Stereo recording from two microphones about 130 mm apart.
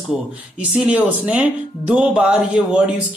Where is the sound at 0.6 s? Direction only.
10° right (ahead or behind).